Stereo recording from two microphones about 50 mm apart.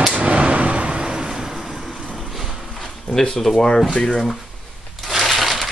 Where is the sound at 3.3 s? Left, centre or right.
Centre.